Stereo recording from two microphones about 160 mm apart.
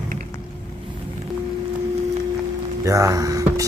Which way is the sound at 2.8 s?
20° right (ahead or behind).